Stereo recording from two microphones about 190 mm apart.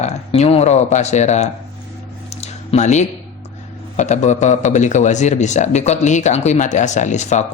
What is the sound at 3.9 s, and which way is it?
A man's voice, 40° left (ahead or behind).